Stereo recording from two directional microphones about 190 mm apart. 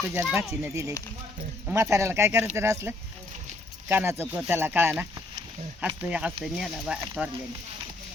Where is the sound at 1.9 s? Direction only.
15° right (ahead or behind).